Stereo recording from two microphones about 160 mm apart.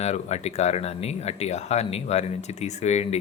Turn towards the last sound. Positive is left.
turn(degrees=45)  # may be behind; listen again after turning